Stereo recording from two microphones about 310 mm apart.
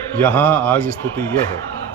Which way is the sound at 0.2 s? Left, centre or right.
Centre.